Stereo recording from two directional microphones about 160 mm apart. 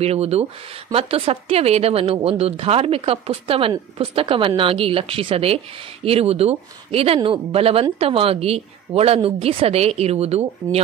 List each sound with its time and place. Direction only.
0.0 s speech: 40° right (ahead or behind)